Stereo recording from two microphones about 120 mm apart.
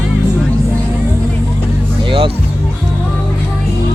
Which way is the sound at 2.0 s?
45° right (ahead or behind).